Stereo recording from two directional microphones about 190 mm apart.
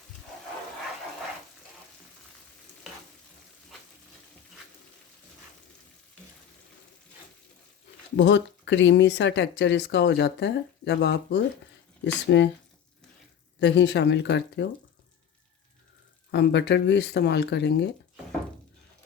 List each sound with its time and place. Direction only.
8.1 s speech: 75° left (ahead or behind)
13.6 s speech: 70° left (ahead or behind)
16.3 s speech: 65° left (ahead or behind)